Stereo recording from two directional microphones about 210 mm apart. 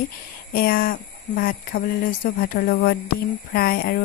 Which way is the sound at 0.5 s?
45° left (ahead or behind).